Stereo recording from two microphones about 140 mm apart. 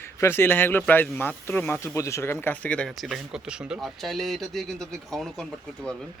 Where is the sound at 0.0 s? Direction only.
15° left (ahead or behind).